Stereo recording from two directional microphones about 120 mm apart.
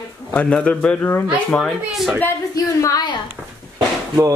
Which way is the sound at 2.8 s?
35° left (ahead or behind).